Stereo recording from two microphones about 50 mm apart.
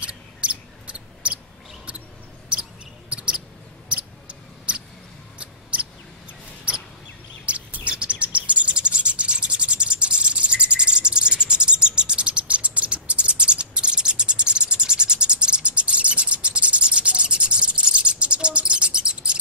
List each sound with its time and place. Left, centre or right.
0.0 s mouse: right
3.1 s mouse: right
7.4 s chirp: right